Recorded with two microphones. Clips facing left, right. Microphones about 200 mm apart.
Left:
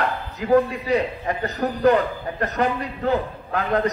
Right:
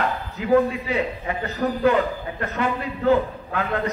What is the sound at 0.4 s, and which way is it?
A man's voice, 40° left (ahead or behind).